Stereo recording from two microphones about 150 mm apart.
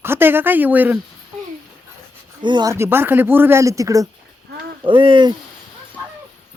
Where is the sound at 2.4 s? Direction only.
30° right (ahead or behind).